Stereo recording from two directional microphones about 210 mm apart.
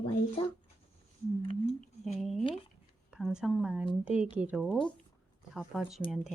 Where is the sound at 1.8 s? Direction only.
Centre (ahead or behind).